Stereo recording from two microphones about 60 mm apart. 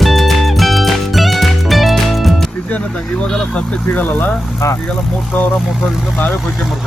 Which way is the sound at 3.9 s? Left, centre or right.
Left.